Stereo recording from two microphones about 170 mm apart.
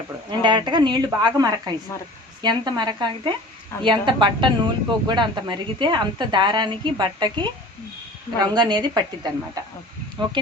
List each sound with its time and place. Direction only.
0.3 s speech: 25° right (ahead or behind)